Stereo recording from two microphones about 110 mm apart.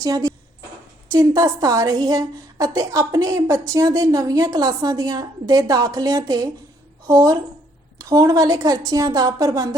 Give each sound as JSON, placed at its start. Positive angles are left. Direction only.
{"t": 0.0, "sound": "a woman's voice", "side_deg": -35}